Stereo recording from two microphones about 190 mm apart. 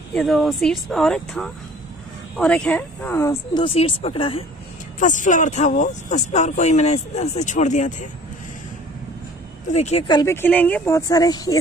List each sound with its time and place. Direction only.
0.1 s speech: centre (ahead or behind)
3.6 s speech: 30° left (ahead or behind)
4.9 s speech: 40° left (ahead or behind)
9.7 s speech: 35° left (ahead or behind)
10.2 s speech: 10° left (ahead or behind)